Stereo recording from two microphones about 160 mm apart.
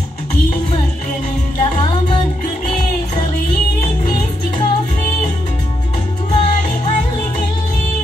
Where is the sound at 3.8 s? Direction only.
45° left (ahead or behind).